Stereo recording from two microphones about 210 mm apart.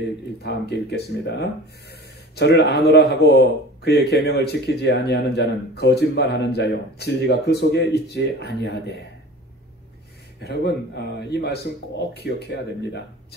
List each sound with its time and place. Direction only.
0.4 s speech: 50° left (ahead or behind)
10.4 s speech: 50° left (ahead or behind)